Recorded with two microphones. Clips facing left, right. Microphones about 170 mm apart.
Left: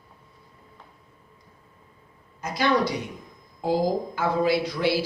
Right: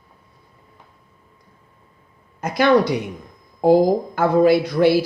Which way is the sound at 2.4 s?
60° right (ahead or behind).